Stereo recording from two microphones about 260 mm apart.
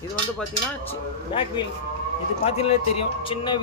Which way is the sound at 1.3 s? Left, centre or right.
Centre.